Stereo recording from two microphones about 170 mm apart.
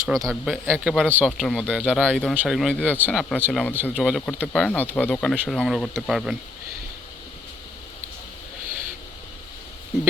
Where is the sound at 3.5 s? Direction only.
Centre (ahead or behind).